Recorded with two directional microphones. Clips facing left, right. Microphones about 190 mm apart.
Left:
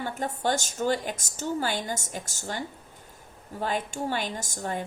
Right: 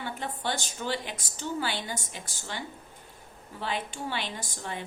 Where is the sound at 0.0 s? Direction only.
45° left (ahead or behind).